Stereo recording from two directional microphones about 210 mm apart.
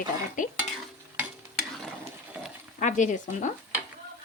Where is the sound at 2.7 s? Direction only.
35° left (ahead or behind).